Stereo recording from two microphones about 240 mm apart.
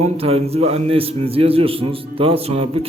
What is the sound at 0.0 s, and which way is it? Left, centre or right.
A man's voice, right.